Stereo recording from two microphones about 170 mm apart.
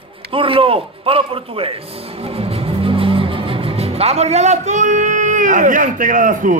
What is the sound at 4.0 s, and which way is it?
A man's voice, 40° right (ahead or behind).